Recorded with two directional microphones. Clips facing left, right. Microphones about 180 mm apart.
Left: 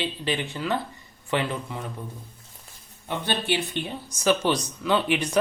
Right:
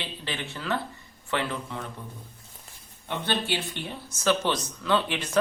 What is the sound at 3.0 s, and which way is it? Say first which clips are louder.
Speech: left 2 dB; 15° left (ahead or behind).